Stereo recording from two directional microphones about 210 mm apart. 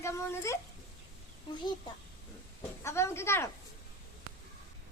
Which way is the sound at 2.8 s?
10° left (ahead or behind).